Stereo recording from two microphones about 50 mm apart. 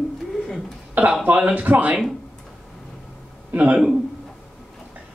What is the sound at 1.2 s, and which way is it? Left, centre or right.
Speech, right.